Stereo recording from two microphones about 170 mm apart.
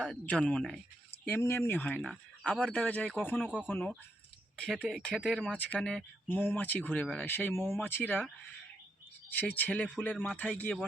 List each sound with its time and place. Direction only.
0.0 s speech: 5° left (ahead or behind)
2.8 s speech: 10° left (ahead or behind)
3.3 s speech: 5° right (ahead or behind)
3.7 s speech: 5° left (ahead or behind)
9.3 s speech: 10° left (ahead or behind)